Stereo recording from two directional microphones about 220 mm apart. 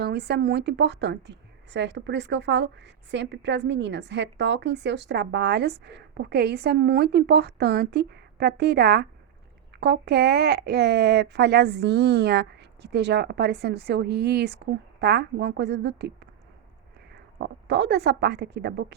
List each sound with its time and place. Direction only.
0.0 s a woman's voice: 45° right (ahead or behind)
17.3 s a woman's voice: 50° right (ahead or behind)